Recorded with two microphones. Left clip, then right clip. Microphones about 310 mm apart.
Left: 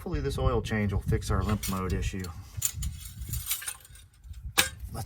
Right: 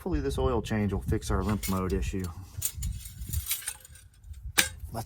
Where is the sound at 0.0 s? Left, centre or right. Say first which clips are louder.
Right 2 dB; centre.